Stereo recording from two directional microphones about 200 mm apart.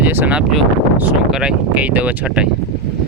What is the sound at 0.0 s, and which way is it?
Speech, 10° right (ahead or behind).